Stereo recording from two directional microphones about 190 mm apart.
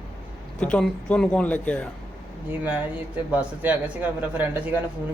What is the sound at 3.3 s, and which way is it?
A man's voice, 10° right (ahead or behind).